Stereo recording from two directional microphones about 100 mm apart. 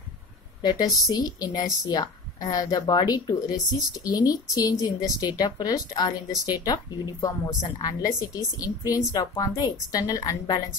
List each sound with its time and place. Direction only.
0.6 s speech: 45° left (ahead or behind)